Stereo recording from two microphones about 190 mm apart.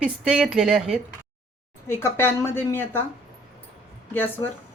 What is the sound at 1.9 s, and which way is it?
Speech, 10° left (ahead or behind).